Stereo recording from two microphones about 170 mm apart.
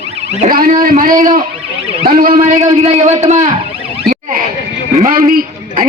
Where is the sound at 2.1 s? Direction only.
55° right (ahead or behind).